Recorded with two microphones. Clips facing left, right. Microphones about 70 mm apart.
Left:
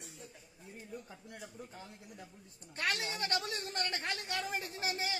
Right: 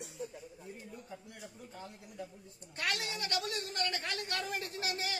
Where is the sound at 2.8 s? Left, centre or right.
Left.